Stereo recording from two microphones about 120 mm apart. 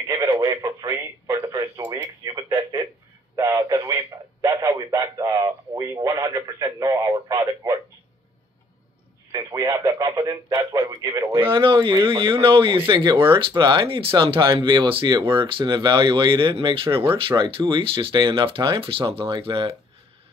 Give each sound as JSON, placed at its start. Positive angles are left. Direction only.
{"t": 0.1, "sound": "a man's voice", "side_deg": -25}
{"t": 3.3, "sound": "a man's voice", "side_deg": -25}
{"t": 7.6, "sound": "a sound", "side_deg": -35}
{"t": 9.3, "sound": "radio", "side_deg": -25}
{"t": 9.8, "sound": "a man's voice", "side_deg": -35}
{"t": 11.5, "sound": "speech", "side_deg": -45}